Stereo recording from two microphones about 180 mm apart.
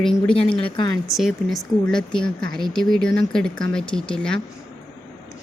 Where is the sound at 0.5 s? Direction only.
25° left (ahead or behind).